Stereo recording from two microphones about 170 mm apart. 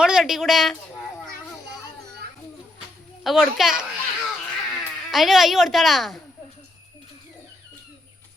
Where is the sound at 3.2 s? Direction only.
Centre (ahead or behind).